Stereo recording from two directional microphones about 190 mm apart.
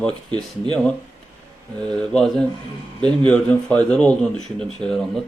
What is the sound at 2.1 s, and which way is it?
Speech, 5° left (ahead or behind).